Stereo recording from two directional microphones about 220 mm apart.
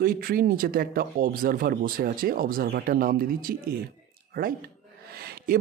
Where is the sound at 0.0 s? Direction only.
40° right (ahead or behind).